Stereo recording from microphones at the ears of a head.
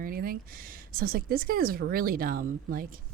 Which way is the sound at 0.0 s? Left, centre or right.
Right.